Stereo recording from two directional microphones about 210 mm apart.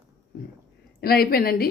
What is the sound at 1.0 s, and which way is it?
Speech, 45° left (ahead or behind).